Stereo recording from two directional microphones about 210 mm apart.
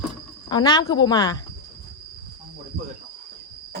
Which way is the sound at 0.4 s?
20° left (ahead or behind).